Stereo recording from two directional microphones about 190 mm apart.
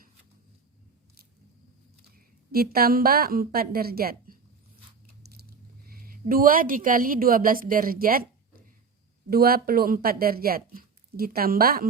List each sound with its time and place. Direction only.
2.1 s a woman's voice: 50° right (ahead or behind)
9.3 s speech: 55° right (ahead or behind)